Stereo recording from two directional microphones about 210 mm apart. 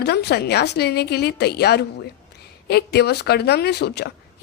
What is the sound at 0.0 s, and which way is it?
Speech, 50° left (ahead or behind).